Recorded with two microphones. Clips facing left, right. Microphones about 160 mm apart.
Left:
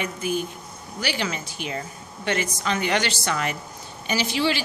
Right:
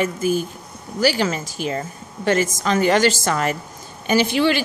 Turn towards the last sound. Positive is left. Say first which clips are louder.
# right 6 dB
turn(degrees=-55)  # may be behind; listen again after turning